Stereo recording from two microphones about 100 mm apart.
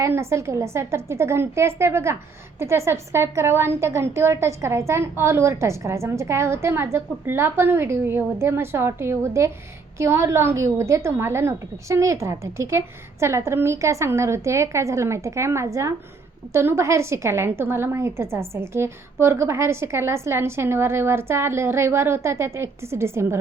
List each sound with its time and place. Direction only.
0.0 s a woman's voice: 25° right (ahead or behind)